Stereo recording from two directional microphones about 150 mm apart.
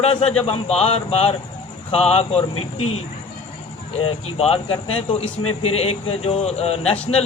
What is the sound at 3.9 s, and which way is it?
A man's voice, 45° left (ahead or behind).